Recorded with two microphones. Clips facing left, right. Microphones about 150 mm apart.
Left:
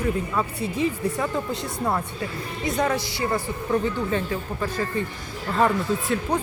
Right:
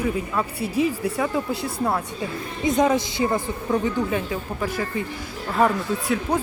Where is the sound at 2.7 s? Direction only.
20° right (ahead or behind).